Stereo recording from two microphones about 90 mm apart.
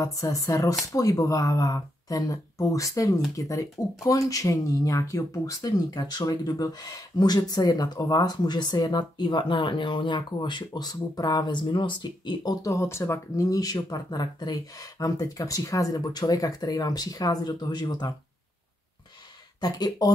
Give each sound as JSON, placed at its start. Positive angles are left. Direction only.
{"t": 0.0, "sound": "speech", "side_deg": 40}
{"t": 12.6, "sound": "speech", "side_deg": 35}
{"t": 19.6, "sound": "speech", "side_deg": 50}